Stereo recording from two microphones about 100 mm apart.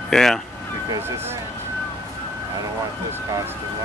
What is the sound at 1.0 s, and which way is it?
Speech, 25° right (ahead or behind).